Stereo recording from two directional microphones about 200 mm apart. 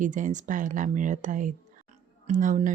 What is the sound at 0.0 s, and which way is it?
A woman's voice, 40° right (ahead or behind).